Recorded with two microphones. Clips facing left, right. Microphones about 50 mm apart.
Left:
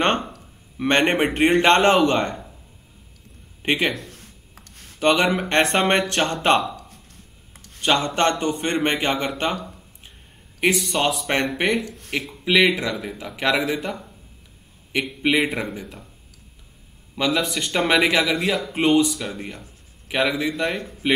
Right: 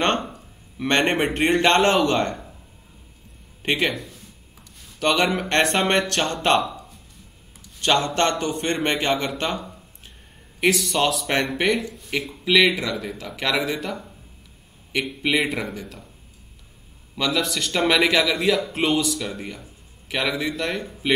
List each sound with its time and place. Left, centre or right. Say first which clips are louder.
0.7 s a man's voice: left 2 dB; centre
1.8 s speech: left 2 dB; centre
3.9 s a sound: even; left
5.0 s a man's voice: left 2 dB; centre
7.8 s a man's voice: left 1 dB; centre
10.6 s a man's voice: even; centre
14.9 s a man's voice: left 2 dB; centre
15.7 s a man's voice: left 1 dB; centre
17.1 s a man's voice: left 1 dB; centre